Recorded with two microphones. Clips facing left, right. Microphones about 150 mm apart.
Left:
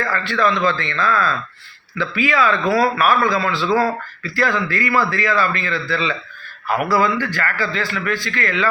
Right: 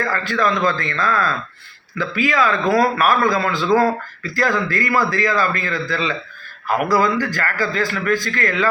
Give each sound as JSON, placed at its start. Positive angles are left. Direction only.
{"t": 0.1, "sound": "speech", "side_deg": -45}